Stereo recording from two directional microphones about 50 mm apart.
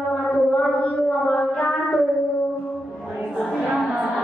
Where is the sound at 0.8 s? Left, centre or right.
Left.